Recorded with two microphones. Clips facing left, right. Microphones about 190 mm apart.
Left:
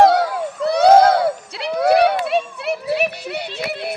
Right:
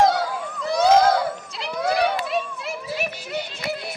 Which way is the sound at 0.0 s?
65° left (ahead or behind).